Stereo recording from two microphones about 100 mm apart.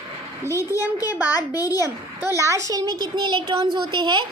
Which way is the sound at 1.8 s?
30° right (ahead or behind).